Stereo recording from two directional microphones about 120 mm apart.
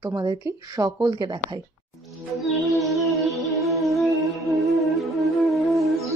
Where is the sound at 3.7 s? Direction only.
Centre (ahead or behind).